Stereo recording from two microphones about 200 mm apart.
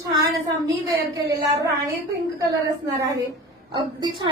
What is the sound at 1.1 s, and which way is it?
Speech, 15° right (ahead or behind).